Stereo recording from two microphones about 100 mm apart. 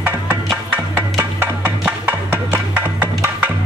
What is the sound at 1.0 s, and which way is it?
Music, 15° right (ahead or behind).